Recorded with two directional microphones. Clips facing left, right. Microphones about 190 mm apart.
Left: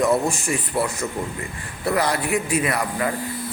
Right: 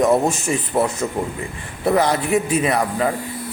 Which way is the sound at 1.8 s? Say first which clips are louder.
Right 4 dB; 25° right (ahead or behind).